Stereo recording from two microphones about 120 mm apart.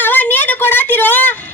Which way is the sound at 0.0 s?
15° left (ahead or behind).